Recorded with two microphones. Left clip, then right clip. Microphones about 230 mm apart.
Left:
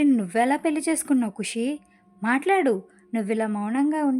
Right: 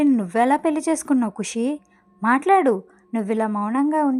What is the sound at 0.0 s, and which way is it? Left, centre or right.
Speech, centre.